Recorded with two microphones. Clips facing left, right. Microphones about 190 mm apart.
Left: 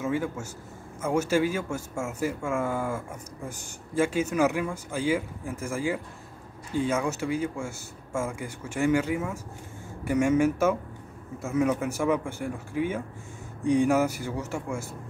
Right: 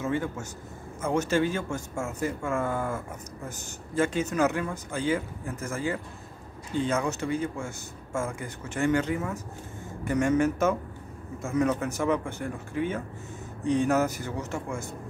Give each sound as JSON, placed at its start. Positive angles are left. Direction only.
{"t": 0.0, "sound": "a man's voice", "side_deg": 10}